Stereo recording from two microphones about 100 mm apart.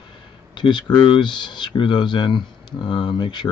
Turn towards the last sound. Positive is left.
turn(degrees=50)  # may be behind; listen again after turning